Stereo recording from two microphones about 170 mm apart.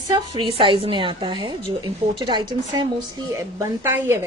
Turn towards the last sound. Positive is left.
turn(degrees=-15)  # may be behind; listen again after turning